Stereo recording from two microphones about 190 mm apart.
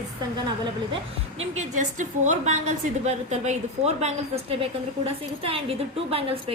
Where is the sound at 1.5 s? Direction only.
40° right (ahead or behind).